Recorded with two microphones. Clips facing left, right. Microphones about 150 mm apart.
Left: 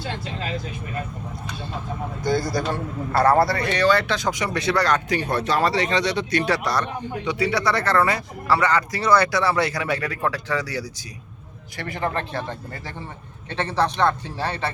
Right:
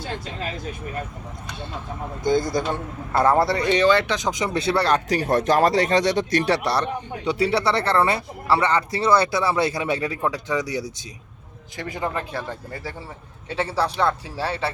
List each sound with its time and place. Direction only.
2.2 s a man's voice: 20° right (ahead or behind)